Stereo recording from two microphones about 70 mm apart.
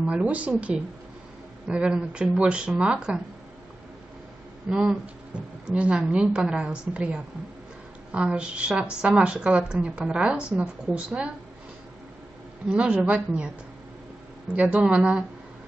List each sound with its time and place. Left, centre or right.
0.0 s speech: centre
4.6 s speech: centre
12.6 s speech: centre
14.5 s speech: centre